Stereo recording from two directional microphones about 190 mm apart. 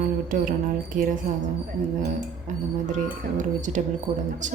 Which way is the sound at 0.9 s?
45° right (ahead or behind).